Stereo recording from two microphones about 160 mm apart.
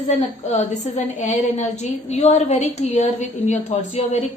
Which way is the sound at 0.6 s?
45° left (ahead or behind).